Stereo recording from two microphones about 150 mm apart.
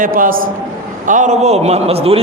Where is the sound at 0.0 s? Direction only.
70° right (ahead or behind).